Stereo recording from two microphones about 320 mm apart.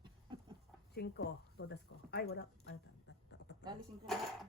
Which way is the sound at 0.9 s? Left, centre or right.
Left.